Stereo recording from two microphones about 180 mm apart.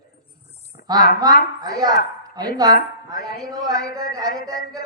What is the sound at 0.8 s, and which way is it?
A woman's voice, 20° right (ahead or behind).